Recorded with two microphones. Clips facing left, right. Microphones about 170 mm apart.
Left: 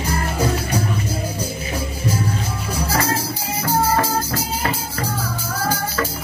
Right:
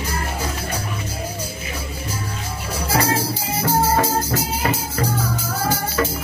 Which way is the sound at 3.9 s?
20° right (ahead or behind).